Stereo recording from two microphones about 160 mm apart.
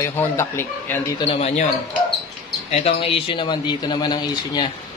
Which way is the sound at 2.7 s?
40° left (ahead or behind).